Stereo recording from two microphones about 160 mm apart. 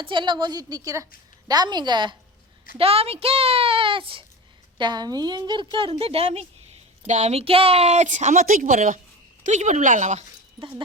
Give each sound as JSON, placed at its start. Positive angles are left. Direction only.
{"t": 0.0, "sound": "a woman's voice", "side_deg": -30}